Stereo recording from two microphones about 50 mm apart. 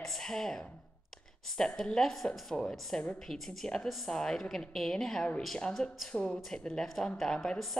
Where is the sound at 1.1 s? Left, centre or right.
Centre.